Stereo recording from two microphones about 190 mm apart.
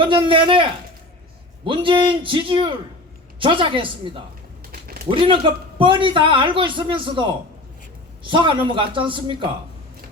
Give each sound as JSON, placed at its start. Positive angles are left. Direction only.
{"t": 0.0, "sound": "a man's voice", "side_deg": -25}
{"t": 4.7, "sound": "a sound", "side_deg": -50}
{"t": 5.0, "sound": "a man's voice", "side_deg": -25}